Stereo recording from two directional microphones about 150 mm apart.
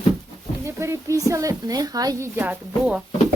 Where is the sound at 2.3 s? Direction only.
10° right (ahead or behind).